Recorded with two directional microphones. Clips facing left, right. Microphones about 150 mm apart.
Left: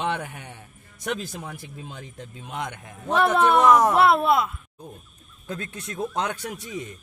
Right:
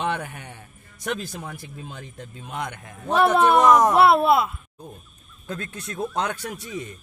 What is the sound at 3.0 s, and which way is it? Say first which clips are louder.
Speech: right 2 dB; 10° right (ahead or behind).